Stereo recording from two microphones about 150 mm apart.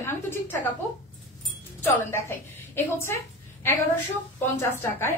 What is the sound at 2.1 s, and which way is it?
A woman's voice, 15° left (ahead or behind).